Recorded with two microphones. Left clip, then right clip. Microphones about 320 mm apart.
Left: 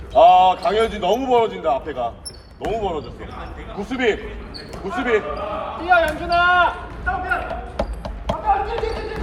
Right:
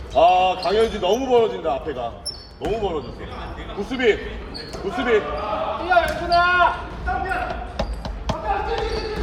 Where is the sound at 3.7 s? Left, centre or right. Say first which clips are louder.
Right 1 dB; left.